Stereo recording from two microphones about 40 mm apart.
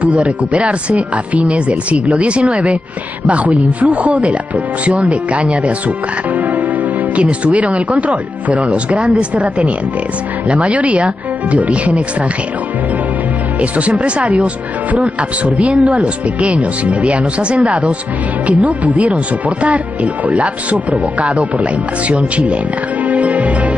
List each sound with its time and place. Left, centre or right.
0.0 s speech: right
7.2 s speech: right
13.6 s speech: right
23.0 s music: right